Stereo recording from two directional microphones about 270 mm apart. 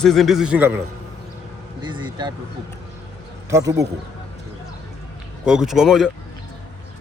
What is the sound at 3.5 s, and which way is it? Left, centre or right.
Speech, centre.